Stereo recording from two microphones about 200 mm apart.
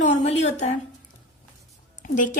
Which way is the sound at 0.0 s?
35° left (ahead or behind).